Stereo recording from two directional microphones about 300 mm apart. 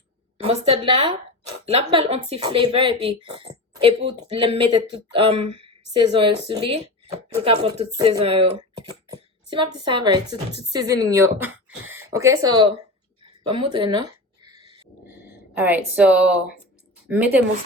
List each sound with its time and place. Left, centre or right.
0.4 s speech: centre
14.4 s dog: centre
15.5 s a woman's voice: centre